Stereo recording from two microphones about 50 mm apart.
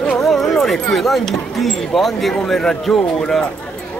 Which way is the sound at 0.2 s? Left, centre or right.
Centre.